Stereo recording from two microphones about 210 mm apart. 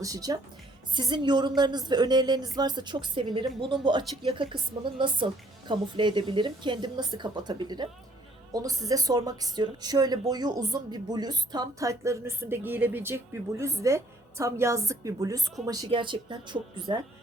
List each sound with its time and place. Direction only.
0.0 s a woman's voice: 15° right (ahead or behind)